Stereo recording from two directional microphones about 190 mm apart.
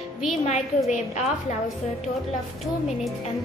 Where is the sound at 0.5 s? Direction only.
40° left (ahead or behind).